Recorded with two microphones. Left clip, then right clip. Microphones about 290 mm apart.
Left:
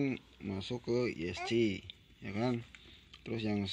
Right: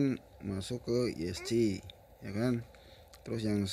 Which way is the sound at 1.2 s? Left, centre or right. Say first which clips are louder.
Even; right.